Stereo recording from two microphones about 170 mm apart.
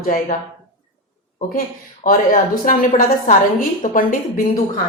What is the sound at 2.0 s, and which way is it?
A woman's voice, 55° left (ahead or behind).